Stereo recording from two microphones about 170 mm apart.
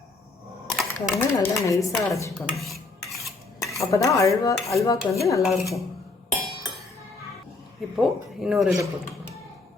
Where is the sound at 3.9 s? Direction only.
20° left (ahead or behind).